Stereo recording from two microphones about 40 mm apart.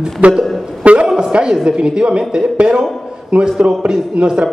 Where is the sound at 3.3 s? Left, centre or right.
Right.